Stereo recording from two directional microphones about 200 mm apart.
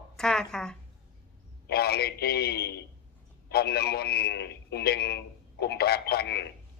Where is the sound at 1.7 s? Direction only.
50° left (ahead or behind).